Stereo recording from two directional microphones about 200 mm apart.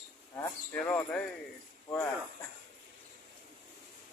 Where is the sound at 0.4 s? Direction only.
10° left (ahead or behind).